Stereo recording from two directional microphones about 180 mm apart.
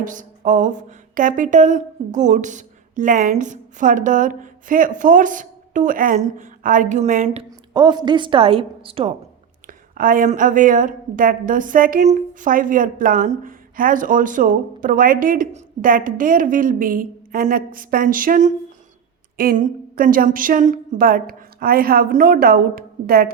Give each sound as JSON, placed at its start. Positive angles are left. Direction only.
{"t": 0.0, "sound": "a woman's voice", "side_deg": -45}
{"t": 7.7, "sound": "a woman's voice", "side_deg": -25}
{"t": 9.6, "sound": "a woman's voice", "side_deg": -50}